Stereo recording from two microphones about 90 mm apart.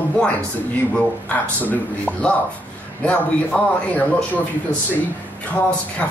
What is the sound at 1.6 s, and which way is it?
Speech, 15° left (ahead or behind).